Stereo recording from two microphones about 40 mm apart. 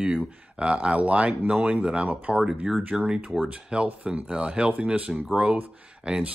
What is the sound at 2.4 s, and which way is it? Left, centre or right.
Speech, centre.